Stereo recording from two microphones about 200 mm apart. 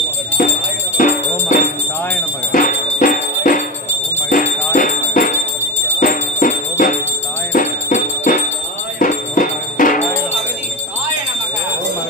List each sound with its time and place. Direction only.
0.9 s music: 40° left (ahead or behind)